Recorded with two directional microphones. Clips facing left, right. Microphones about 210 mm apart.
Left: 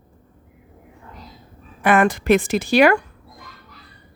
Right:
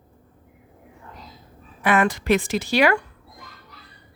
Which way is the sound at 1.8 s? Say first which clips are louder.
Left 3 dB; 50° left (ahead or behind).